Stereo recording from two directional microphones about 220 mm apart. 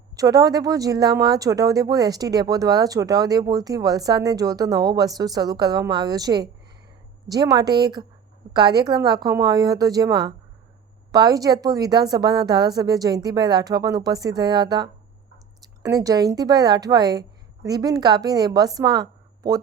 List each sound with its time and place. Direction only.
0.2 s a woman's voice: 15° right (ahead or behind)